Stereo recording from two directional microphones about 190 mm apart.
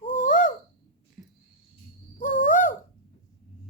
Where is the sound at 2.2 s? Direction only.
45° left (ahead or behind).